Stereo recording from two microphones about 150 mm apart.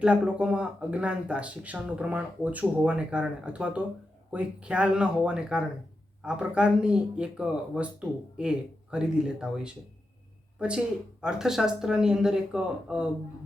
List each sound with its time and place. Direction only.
0.0 s speech: 5° right (ahead or behind)